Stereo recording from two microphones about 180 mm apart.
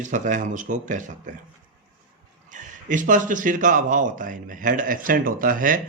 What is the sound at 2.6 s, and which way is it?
A man's voice, 45° right (ahead or behind).